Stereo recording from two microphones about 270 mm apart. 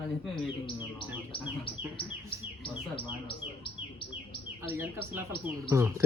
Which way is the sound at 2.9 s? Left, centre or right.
Centre.